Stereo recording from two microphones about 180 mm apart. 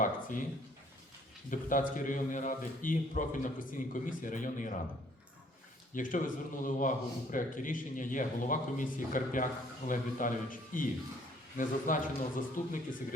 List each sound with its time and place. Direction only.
0.0 s a sound: 45° left (ahead or behind)
1.5 s a man's voice: 45° left (ahead or behind)
5.9 s a man's voice: 50° left (ahead or behind)